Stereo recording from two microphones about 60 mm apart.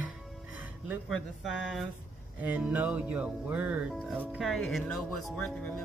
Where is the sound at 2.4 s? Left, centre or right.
Right.